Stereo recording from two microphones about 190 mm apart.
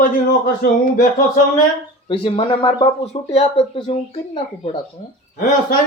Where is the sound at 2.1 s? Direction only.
30° left (ahead or behind).